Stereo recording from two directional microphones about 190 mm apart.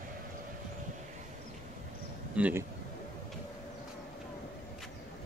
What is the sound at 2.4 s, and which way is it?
Speech, 10° right (ahead or behind).